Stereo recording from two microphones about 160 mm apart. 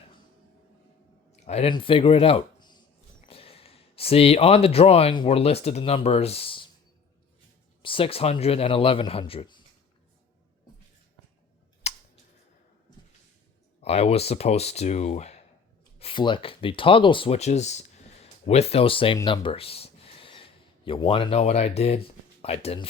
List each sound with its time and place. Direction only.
1.5 s speech: 40° left (ahead or behind)
7.8 s a man's voice: 35° left (ahead or behind)
11.9 s clicking: 40° left (ahead or behind)
13.8 s a man's voice: 40° left (ahead or behind)
16.0 s speech: 35° left (ahead or behind)